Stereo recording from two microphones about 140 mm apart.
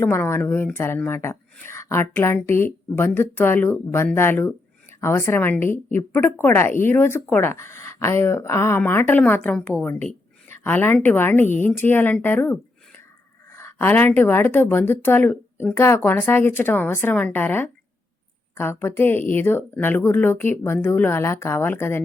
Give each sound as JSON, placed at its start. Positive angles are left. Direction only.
{"t": 0.0, "sound": "speech", "side_deg": 15}